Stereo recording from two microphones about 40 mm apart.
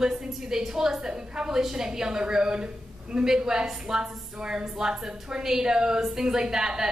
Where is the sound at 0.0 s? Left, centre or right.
Centre.